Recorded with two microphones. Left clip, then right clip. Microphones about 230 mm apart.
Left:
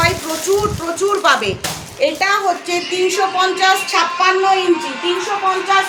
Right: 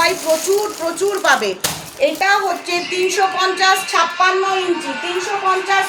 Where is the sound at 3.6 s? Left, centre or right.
Centre.